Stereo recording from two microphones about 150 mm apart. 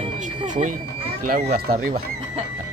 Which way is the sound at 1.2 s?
70° right (ahead or behind).